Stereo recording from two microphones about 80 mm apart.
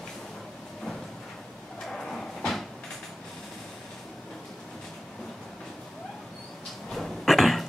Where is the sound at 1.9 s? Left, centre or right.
Centre.